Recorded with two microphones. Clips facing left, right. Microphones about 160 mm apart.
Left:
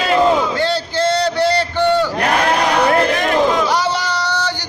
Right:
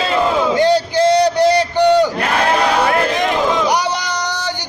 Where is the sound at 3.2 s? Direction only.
15° right (ahead or behind).